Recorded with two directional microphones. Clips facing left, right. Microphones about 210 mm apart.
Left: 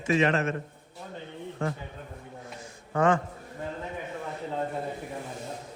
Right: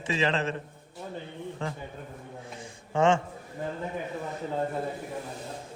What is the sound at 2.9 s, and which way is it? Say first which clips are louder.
Speech: right 1 dB; 25° right (ahead or behind).